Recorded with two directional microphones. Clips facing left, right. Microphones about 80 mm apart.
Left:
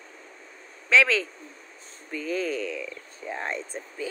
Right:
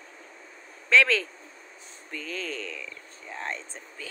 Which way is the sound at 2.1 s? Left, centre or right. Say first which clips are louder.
Left 7 dB; centre.